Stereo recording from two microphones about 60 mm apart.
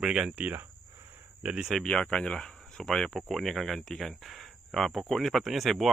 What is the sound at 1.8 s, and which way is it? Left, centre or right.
Speech, centre.